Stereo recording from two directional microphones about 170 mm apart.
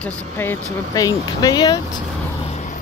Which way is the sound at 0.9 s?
20° left (ahead or behind).